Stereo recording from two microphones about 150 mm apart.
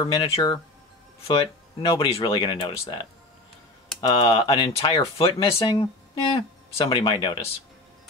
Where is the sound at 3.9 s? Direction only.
25° left (ahead or behind).